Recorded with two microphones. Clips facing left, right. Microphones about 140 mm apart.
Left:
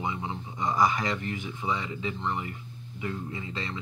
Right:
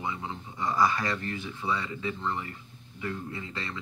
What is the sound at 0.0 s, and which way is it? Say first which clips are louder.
Speech: left 2 dB; 20° left (ahead or behind).